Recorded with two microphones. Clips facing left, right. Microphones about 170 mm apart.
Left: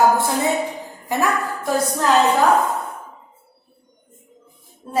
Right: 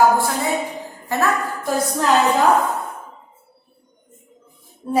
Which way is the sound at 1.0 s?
15° left (ahead or behind).